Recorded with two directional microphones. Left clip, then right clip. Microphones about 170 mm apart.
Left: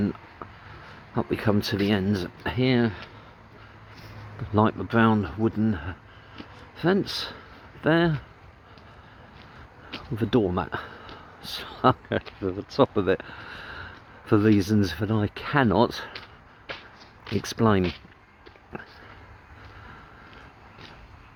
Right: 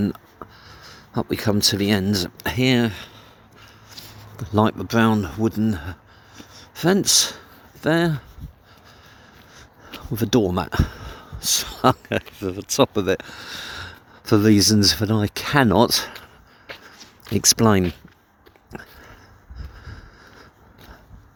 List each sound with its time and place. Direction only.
0.0 s a sound: 25° right (ahead or behind)
1.1 s speech: 30° right (ahead or behind)
10.2 s speech: 35° right (ahead or behind)
17.3 s speech: 35° right (ahead or behind)